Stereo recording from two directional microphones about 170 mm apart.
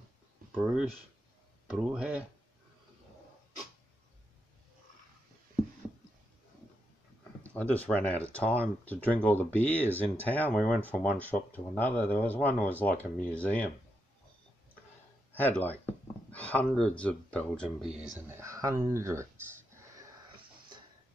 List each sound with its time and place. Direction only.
1.7 s speech: 5° right (ahead or behind)
7.5 s speech: 10° left (ahead or behind)
15.3 s speech: 10° left (ahead or behind)
18.3 s a sound: 20° right (ahead or behind)